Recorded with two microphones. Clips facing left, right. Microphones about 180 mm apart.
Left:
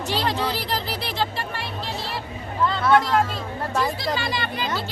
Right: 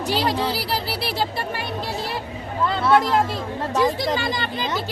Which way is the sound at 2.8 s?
5° right (ahead or behind).